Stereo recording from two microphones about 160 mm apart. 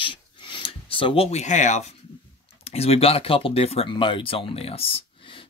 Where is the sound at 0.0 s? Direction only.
30° left (ahead or behind); by 1.9 s 50° left (ahead or behind).